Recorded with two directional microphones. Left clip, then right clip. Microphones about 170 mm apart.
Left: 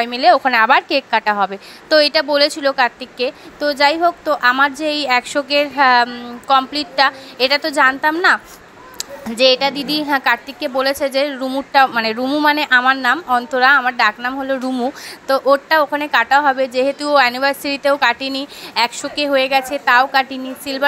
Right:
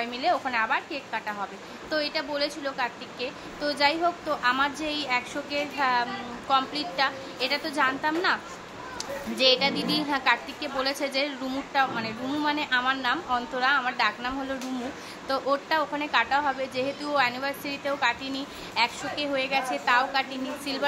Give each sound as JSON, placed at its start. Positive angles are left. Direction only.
{"t": 0.0, "sound": "a woman's voice", "side_deg": 45}